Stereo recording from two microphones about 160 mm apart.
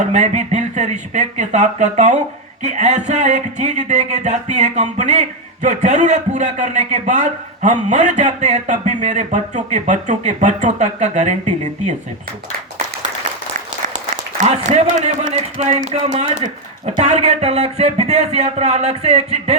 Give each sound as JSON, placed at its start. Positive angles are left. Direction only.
{"t": 0.1, "sound": "a man's voice", "side_deg": -50}
{"t": 14.4, "sound": "a man's voice", "side_deg": -50}